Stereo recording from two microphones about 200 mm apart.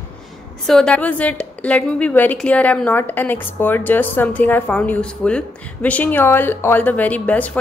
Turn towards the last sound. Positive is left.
turn(degrees=10)  # may be behind; listen again after turning